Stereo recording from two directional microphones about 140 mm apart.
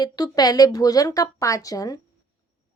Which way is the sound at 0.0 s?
30° left (ahead or behind).